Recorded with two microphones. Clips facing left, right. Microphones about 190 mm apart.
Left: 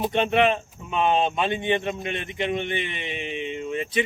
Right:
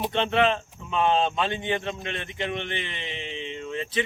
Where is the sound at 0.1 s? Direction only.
15° left (ahead or behind).